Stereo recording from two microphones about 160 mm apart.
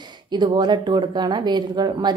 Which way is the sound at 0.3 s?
30° right (ahead or behind).